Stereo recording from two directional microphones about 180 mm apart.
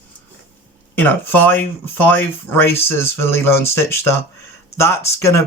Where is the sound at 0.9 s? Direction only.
10° left (ahead or behind).